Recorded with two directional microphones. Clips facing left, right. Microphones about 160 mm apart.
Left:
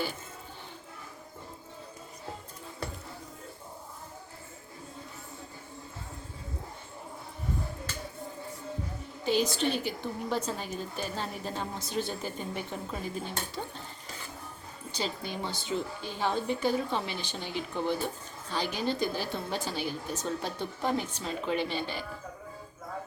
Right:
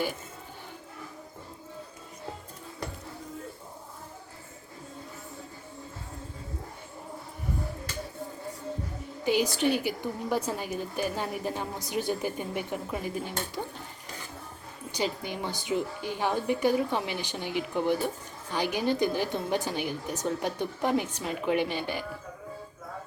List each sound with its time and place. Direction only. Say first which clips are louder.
9.2 s a woman's voice: right 2 dB; 15° right (ahead or behind)
14.9 s a woman's voice: right 3 dB; 15° right (ahead or behind)